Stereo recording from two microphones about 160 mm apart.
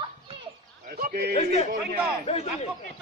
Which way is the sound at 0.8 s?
65° right (ahead or behind).